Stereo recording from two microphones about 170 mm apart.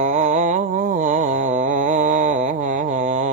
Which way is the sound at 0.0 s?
45° right (ahead or behind).